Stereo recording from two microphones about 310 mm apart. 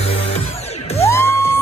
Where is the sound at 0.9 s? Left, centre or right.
Centre.